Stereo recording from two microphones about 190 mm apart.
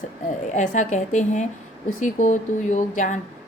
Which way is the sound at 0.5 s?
40° left (ahead or behind).